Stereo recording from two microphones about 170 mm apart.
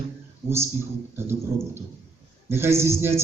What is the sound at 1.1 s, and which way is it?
Speech, 15° right (ahead or behind).